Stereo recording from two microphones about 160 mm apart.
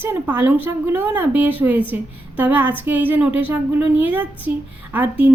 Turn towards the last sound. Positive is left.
turn(degrees=-10)  # may be behind; listen again after turning